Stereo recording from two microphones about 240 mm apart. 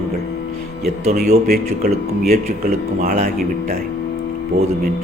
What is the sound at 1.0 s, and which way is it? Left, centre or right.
Speech, right.